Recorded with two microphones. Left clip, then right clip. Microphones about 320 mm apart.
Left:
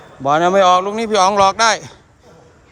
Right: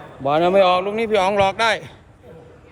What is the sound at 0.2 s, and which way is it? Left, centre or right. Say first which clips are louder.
Speech: left 3 dB; centre.